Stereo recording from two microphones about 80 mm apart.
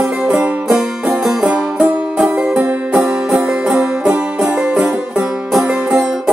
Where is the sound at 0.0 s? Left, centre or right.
Centre.